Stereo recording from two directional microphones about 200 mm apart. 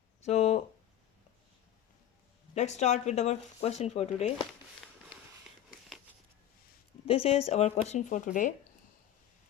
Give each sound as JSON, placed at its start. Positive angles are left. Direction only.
{"t": 0.2, "sound": "a sound", "side_deg": 35}
{"t": 2.6, "sound": "speech", "side_deg": 35}
{"t": 7.0, "sound": "speech", "side_deg": 30}